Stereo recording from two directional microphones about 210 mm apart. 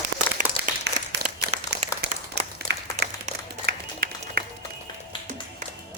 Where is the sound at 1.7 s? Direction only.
55° right (ahead or behind).